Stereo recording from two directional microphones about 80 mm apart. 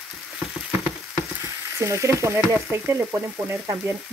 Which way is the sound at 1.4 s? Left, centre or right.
Right.